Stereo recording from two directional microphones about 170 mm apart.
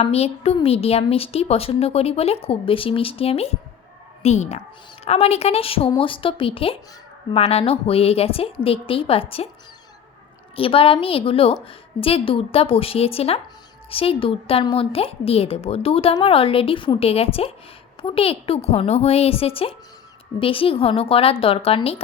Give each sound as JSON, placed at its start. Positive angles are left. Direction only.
{"t": 0.0, "sound": "a woman's voice", "side_deg": 35}
{"t": 10.5, "sound": "a woman's voice", "side_deg": 30}